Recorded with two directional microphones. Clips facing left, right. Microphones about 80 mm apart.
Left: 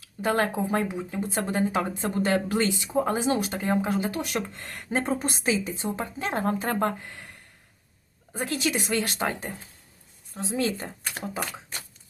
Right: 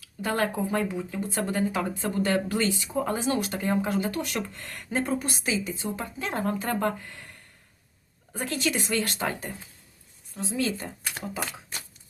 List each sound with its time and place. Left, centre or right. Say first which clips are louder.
0.0 s a woman's voice: left 2 dB; left
5.2 s speech: left 3 dB; left
8.3 s speech: left 1 dB; centre
10.3 s speech: left 1 dB; left